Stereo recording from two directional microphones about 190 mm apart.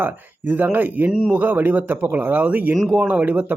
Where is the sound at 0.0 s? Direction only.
10° right (ahead or behind).